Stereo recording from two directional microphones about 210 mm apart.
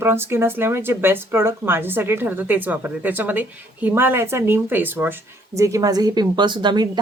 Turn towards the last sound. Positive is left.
turn(degrees=-20)  # may be behind; listen again after turning